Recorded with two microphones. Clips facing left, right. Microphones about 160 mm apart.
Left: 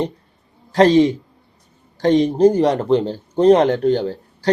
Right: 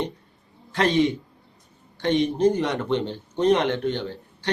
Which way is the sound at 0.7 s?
35° left (ahead or behind).